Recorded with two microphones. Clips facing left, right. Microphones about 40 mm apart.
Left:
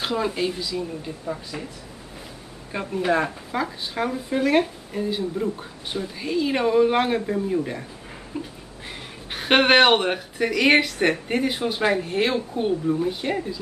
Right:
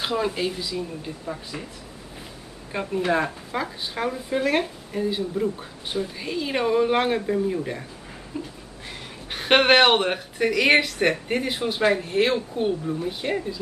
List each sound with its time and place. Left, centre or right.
0.0 s speech: centre
2.7 s speech: centre